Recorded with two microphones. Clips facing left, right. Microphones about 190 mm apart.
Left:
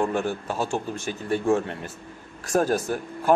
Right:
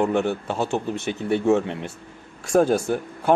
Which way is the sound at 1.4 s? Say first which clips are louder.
Right 3 dB; 20° right (ahead or behind).